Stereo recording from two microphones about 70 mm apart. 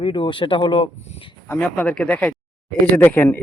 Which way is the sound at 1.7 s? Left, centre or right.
Centre.